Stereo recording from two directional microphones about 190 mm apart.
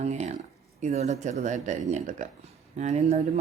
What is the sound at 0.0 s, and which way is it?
Speech, 35° right (ahead or behind).